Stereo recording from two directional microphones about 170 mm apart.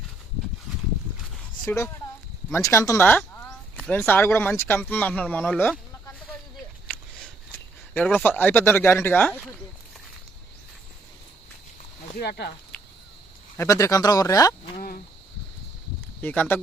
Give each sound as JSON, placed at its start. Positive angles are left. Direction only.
{"t": 1.6, "sound": "a woman's voice", "side_deg": 15}
{"t": 6.8, "sound": "a sound", "side_deg": 5}
{"t": 12.2, "sound": "speech", "side_deg": 75}
{"t": 12.7, "sound": "cricket", "side_deg": 5}
{"t": 13.6, "sound": "speech", "side_deg": 20}
{"t": 14.8, "sound": "a sound", "side_deg": 55}
{"t": 16.2, "sound": "speech", "side_deg": 10}